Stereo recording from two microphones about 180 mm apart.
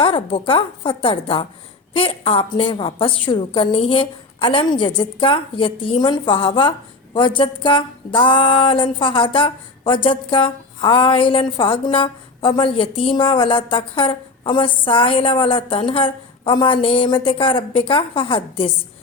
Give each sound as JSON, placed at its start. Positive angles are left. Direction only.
{"t": 0.0, "sound": "a woman's voice", "side_deg": 30}